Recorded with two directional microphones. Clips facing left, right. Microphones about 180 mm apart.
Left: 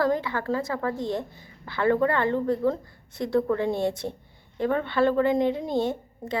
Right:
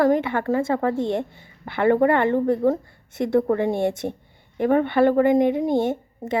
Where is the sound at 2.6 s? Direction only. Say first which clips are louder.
Right 5 dB; 55° right (ahead or behind).